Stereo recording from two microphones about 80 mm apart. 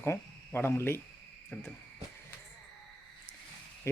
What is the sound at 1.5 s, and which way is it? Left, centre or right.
Speech, centre.